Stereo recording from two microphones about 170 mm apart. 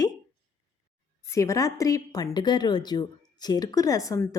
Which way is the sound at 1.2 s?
15° left (ahead or behind).